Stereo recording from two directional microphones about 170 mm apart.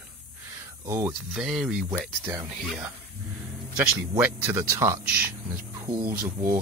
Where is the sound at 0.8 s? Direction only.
15° right (ahead or behind).